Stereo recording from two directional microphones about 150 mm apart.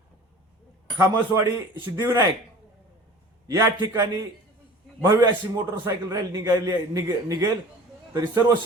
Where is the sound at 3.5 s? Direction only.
25° right (ahead or behind).